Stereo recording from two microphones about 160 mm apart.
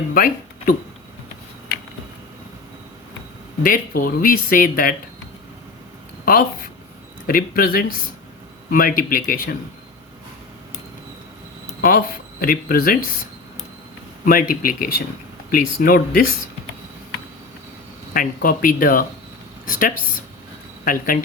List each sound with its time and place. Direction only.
0.1 s speech: 60° left (ahead or behind)
3.6 s speech: 60° left (ahead or behind)
7.3 s speech: 65° left (ahead or behind)
11.8 s speech: 65° left (ahead or behind)
14.3 s speech: 60° left (ahead or behind)
18.1 s speech: 60° left (ahead or behind)